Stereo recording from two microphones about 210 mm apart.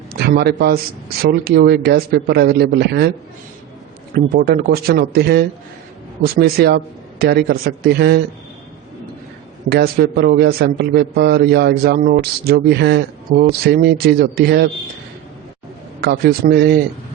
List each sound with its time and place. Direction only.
0.1 s a man's voice: 50° right (ahead or behind)
4.1 s a man's voice: 45° right (ahead or behind)
9.6 s a man's voice: 50° right (ahead or behind)
16.0 s a man's voice: 50° right (ahead or behind)